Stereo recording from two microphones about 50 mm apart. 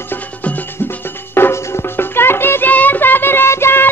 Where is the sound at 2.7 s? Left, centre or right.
Left.